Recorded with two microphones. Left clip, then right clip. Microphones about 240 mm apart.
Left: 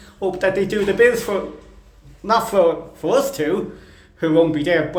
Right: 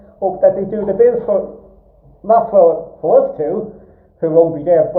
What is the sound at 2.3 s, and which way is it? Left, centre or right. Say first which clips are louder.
Speech: right 6 dB; left.